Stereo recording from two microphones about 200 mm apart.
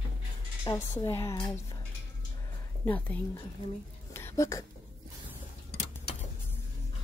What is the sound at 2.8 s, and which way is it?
Speech, 10° left (ahead or behind).